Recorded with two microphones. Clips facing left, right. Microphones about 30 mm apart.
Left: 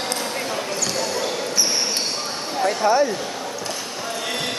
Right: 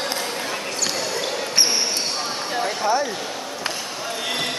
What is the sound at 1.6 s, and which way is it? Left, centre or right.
Basketball bounce, right.